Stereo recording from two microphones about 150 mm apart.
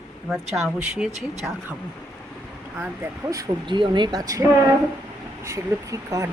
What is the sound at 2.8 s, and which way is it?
Speech, 10° right (ahead or behind).